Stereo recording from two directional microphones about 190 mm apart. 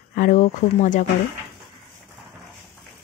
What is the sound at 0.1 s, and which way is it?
Speech, 50° left (ahead or behind).